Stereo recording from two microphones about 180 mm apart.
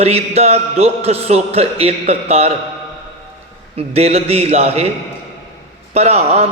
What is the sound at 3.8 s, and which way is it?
A man's voice, 35° right (ahead or behind).